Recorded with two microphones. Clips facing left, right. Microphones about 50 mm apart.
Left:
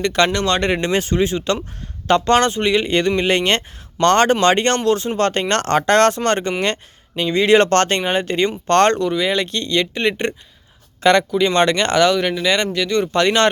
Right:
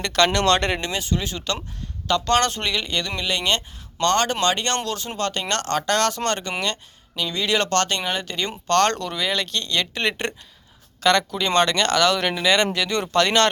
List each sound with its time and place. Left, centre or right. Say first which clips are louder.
0.0 s speech: left 2 dB; centre
0.9 s speech: left 8 dB; left
2.5 s speech: left 8 dB; centre
2.7 s speech: left 9 dB; left
3.2 s speech: left 6 dB; left
8.9 s speech: left 7 dB; centre
12.1 s speech: left 2 dB; centre
13.1 s speech: left 1 dB; centre